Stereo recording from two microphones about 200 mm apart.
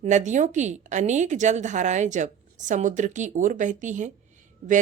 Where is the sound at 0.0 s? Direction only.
35° right (ahead or behind).